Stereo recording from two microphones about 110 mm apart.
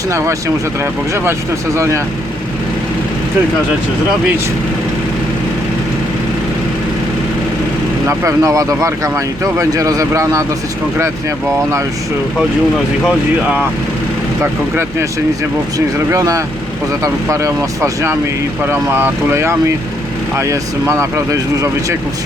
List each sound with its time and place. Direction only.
0.1 s speech: 25° right (ahead or behind)
8.0 s speech: 30° right (ahead or behind)
16.1 s speech: 30° right (ahead or behind)